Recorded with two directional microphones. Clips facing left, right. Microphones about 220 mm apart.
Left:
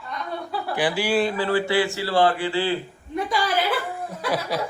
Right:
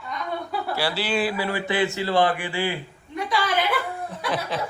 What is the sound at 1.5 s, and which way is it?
A man's voice, 15° right (ahead or behind).